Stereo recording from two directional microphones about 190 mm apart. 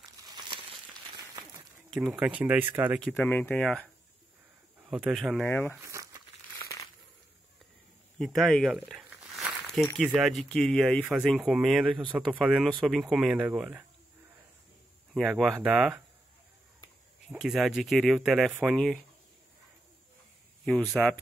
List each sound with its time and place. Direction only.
1.1 s applause: 20° right (ahead or behind)
2.0 s speech: 5° right (ahead or behind)
3.2 s speech: 10° left (ahead or behind)
4.8 s speech: 5° right (ahead or behind)
5.5 s speech: 10° left (ahead or behind)
5.8 s crumpling: 15° right (ahead or behind)
6.6 s crumpling: 15° left (ahead or behind)
8.2 s a sound: centre (ahead or behind)
10.0 s speech: 5° right (ahead or behind)
12.0 s speech: 25° right (ahead or behind)
12.3 s speech: 5° right (ahead or behind)
15.1 s speech: centre (ahead or behind)
17.3 s speech: centre (ahead or behind)
20.6 s speech: centre (ahead or behind)